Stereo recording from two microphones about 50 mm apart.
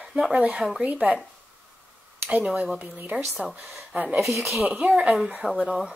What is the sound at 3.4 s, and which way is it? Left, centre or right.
Speech, centre.